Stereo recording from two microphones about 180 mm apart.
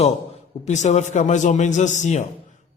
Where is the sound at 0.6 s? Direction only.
40° left (ahead or behind).